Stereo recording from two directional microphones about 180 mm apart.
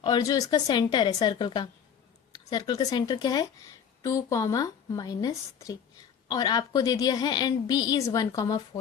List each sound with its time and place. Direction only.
0.0 s a woman's voice: 20° left (ahead or behind)